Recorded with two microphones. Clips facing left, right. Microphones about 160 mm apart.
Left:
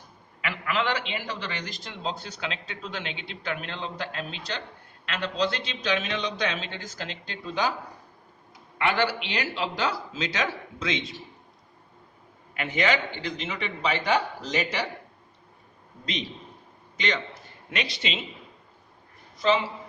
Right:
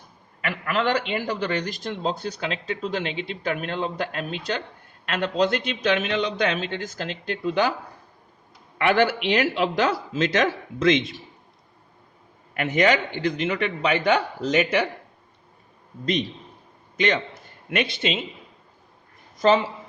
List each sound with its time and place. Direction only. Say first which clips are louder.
0.4 s a man's voice: right 4 dB; 50° right (ahead or behind)
8.8 s a man's voice: right 5 dB; 55° right (ahead or behind)
12.7 s a man's voice: right 5 dB; 45° right (ahead or behind)
17.7 s a man's voice: right 7 dB; 55° right (ahead or behind)
19.4 s a man's voice: right 5 dB; 45° right (ahead or behind)